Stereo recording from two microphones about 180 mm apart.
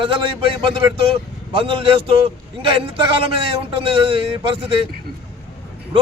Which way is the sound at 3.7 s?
30° right (ahead or behind).